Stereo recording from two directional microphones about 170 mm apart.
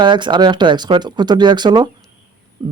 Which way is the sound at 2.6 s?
40° right (ahead or behind).